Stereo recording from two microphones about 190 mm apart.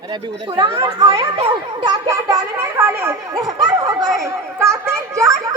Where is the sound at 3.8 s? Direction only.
20° right (ahead or behind).